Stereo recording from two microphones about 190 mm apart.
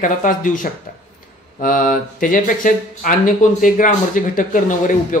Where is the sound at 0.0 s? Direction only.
45° left (ahead or behind).